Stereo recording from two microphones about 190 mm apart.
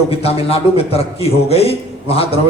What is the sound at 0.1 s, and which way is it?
A man's voice, 30° left (ahead or behind).